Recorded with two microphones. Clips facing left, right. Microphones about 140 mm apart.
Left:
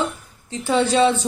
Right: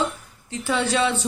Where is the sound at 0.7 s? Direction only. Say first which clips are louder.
Left 5 dB; 30° left (ahead or behind).